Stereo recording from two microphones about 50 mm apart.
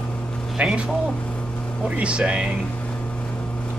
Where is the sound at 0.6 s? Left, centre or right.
Right.